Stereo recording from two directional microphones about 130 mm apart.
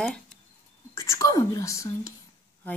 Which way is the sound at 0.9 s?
20° left (ahead or behind).